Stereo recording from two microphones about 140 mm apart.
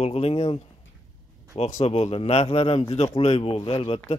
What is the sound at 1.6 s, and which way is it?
Speech, 55° left (ahead or behind).